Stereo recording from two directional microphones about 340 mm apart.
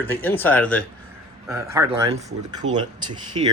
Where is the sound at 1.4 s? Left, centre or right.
Centre.